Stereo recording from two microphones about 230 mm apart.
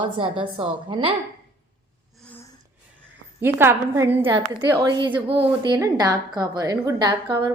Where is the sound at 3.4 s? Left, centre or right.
Centre.